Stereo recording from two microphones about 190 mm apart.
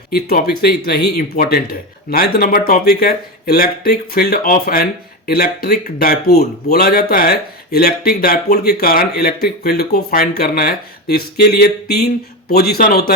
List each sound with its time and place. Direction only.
0.1 s speech: 55° left (ahead or behind)